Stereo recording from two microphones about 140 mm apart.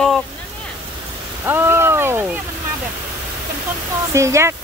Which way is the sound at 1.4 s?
15° right (ahead or behind).